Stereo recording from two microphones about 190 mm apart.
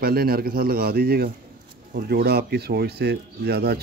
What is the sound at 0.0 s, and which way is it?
A man's voice, 55° right (ahead or behind).